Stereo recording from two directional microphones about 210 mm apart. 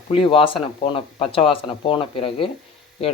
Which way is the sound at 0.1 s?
25° left (ahead or behind).